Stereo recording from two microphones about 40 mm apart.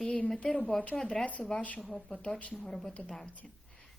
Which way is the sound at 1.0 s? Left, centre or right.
Centre.